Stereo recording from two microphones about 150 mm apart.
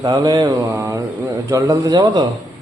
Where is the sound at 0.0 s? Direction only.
25° right (ahead or behind).